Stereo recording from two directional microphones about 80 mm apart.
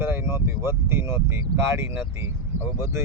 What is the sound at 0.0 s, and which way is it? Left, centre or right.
Speech, right.